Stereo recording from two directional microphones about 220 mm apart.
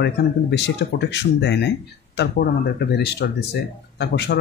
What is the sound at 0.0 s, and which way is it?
Speech, 50° left (ahead or behind).